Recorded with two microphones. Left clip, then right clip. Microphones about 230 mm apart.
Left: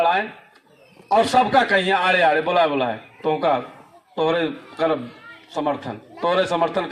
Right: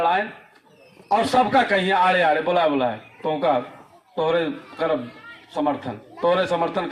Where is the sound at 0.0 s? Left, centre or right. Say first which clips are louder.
Left 1 dB; left.